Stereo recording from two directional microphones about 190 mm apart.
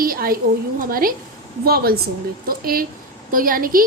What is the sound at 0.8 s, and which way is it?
Speech, 50° right (ahead or behind).